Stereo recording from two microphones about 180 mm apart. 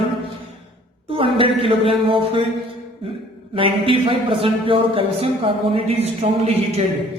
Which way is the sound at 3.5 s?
30° right (ahead or behind).